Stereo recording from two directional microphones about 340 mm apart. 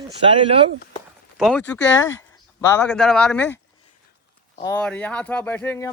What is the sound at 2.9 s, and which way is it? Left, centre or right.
A man's voice, centre.